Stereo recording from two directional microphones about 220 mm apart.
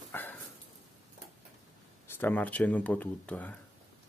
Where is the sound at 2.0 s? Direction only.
10° left (ahead or behind).